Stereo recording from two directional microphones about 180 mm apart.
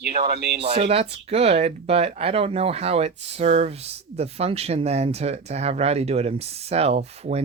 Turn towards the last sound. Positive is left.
turn(degrees=-35)  # may be behind; listen again after turning